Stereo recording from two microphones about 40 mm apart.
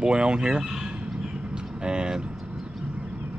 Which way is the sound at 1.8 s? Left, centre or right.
Right.